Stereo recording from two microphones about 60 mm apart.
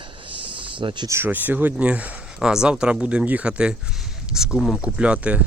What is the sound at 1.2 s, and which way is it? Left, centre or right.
Speech, right.